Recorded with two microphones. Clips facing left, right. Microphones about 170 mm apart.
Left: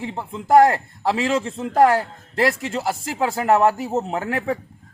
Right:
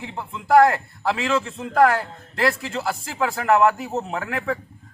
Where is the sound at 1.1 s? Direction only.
35° left (ahead or behind).